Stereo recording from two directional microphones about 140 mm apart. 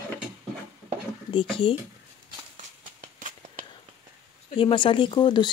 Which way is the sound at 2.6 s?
65° right (ahead or behind).